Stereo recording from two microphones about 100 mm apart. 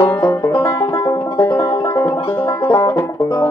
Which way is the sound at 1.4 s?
30° left (ahead or behind).